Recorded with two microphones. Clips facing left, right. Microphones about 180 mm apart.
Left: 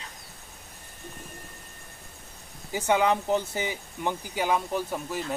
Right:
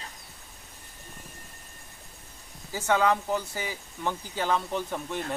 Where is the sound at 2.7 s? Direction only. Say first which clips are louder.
Left 1 dB; 15° left (ahead or behind).